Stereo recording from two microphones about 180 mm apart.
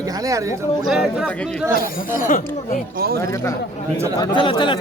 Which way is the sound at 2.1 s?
45° left (ahead or behind).